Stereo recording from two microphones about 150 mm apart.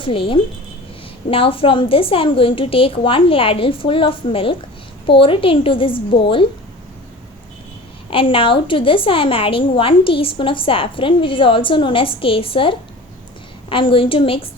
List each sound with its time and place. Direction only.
0.0 s a woman's voice: 35° left (ahead or behind)
8.1 s a woman's voice: 35° left (ahead or behind)